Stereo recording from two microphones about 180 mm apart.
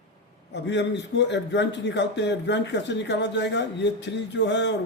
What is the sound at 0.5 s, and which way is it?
A man's voice, 75° left (ahead or behind).